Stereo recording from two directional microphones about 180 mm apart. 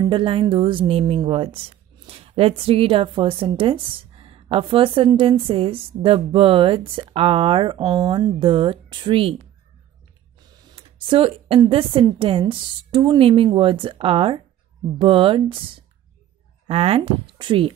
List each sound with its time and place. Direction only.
0.0 s a woman's voice: 30° right (ahead or behind)
10.8 s a sound: 30° right (ahead or behind)
11.7 s a woman's voice: 30° right (ahead or behind)